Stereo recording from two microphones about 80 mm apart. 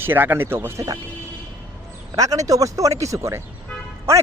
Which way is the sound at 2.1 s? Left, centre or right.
Right.